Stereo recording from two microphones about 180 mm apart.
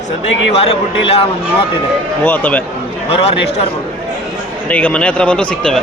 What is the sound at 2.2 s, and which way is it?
Speech, 10° left (ahead or behind).